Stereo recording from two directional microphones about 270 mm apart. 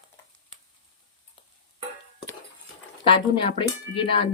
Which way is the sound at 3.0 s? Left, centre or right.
Centre.